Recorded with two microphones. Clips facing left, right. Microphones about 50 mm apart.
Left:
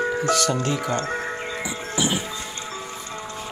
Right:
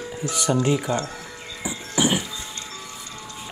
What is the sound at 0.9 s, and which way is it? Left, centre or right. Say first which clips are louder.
Music: left 3 dB; left.